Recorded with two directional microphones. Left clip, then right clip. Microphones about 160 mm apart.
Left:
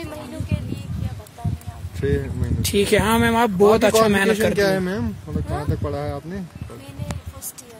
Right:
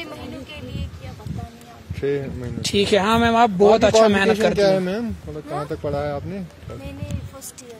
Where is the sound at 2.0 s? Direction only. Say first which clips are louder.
Right 1 dB; 15° left (ahead or behind).